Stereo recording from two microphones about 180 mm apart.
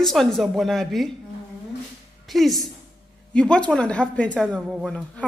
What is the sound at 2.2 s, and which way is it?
A woman's voice, centre (ahead or behind).